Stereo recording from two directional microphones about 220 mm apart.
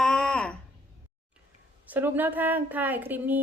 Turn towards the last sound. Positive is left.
turn(degrees=-10)  # may be behind; listen again after turning